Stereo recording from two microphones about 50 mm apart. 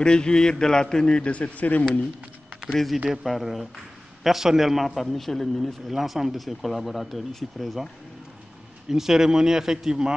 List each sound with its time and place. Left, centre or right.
0.0 s a man's voice: centre
1.2 s speech: left
2.7 s speech: centre
5.9 s speech: centre
8.8 s a man's voice: centre